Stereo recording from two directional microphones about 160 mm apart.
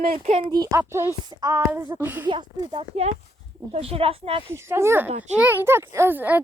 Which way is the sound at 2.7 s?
40° right (ahead or behind).